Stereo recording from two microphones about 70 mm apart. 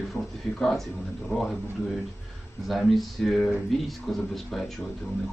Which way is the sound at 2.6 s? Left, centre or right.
Centre.